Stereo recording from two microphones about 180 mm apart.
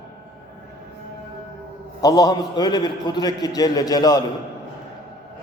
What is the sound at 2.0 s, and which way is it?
A man's voice, 20° left (ahead or behind).